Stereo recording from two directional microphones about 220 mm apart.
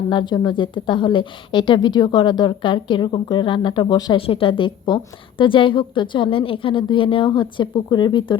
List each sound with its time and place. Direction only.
0.1 s a woman's voice: 20° left (ahead or behind)